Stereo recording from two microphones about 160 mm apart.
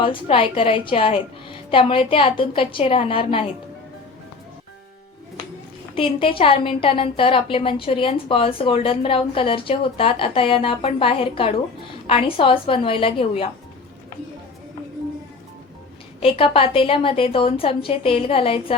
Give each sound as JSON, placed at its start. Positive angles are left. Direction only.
{"t": 0.0, "sound": "a woman's voice", "side_deg": 35}
{"t": 5.9, "sound": "a woman's voice", "side_deg": 35}
{"t": 16.2, "sound": "a woman's voice", "side_deg": 35}